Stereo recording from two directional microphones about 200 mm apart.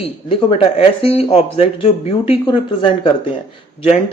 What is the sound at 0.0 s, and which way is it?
Speech, 30° left (ahead or behind).